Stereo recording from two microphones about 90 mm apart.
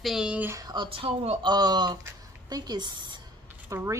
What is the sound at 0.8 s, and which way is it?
Speech, 90° right.